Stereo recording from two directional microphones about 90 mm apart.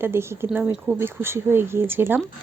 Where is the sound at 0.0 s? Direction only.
25° right (ahead or behind).